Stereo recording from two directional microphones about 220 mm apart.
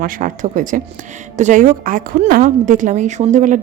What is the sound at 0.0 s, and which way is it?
A woman's voice, 35° right (ahead or behind).